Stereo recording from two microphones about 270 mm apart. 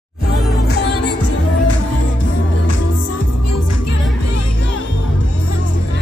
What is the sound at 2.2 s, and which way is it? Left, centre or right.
Music, left.